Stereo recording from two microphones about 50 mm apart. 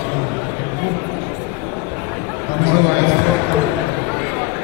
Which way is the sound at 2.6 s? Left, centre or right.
Right.